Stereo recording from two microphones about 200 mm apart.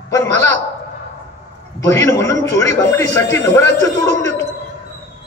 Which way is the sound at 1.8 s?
15° left (ahead or behind).